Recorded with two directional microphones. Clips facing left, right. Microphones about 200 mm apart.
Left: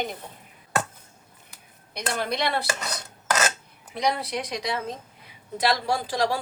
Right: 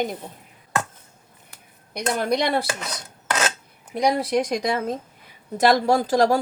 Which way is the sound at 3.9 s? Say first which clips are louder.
Right 6 dB; 50° right (ahead or behind).